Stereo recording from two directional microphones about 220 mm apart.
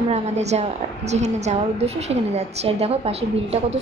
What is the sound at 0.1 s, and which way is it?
A woman's voice, 30° right (ahead or behind).